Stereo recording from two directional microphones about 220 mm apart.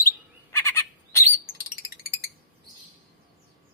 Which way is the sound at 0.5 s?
10° left (ahead or behind).